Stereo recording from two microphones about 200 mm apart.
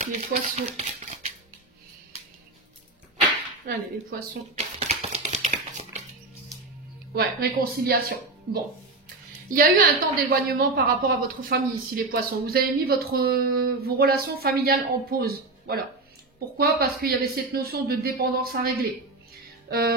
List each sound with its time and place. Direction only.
0.0 s speech: 35° right (ahead or behind)
3.6 s speech: 45° right (ahead or behind)
4.7 s a sound: 35° right (ahead or behind)
7.2 s speech: 50° right (ahead or behind)
9.6 s speech: 45° right (ahead or behind)